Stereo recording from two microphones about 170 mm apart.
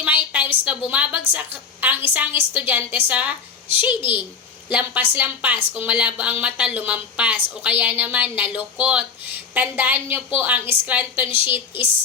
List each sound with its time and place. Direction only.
0.0 s a sound: 10° right (ahead or behind)
0.9 s a woman's voice: 10° right (ahead or behind)
11.3 s a woman's voice: 30° left (ahead or behind)